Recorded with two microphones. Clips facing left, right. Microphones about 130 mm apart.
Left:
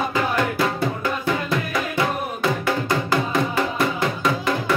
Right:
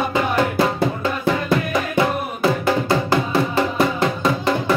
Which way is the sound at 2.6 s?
25° right (ahead or behind).